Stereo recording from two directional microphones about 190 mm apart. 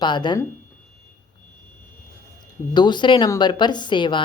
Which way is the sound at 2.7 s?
25° left (ahead or behind).